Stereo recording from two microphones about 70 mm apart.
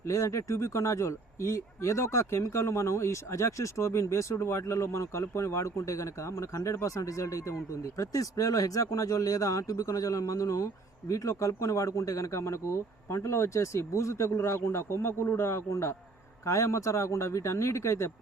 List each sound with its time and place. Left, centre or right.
0.0 s speech: left